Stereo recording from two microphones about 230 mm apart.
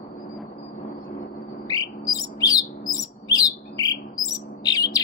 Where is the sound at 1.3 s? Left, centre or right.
Centre.